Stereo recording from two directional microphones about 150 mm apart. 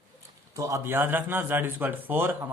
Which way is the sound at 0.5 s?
20° right (ahead or behind).